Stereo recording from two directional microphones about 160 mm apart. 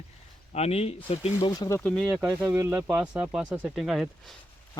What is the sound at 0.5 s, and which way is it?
Speech, 40° left (ahead or behind).